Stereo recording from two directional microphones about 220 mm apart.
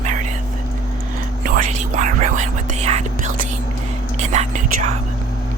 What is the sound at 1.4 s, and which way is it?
Whispering, 35° right (ahead or behind).